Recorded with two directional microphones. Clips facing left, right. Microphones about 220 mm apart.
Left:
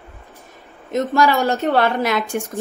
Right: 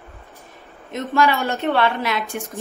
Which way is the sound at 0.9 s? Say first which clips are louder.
Left 3 dB; 40° left (ahead or behind).